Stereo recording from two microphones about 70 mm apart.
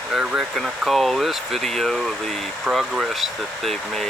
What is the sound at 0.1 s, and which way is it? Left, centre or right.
Speech, centre.